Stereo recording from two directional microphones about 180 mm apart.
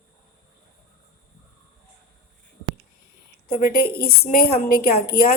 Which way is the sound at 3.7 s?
60° left (ahead or behind).